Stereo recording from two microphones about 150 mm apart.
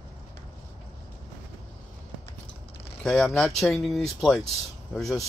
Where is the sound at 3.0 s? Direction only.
5° left (ahead or behind).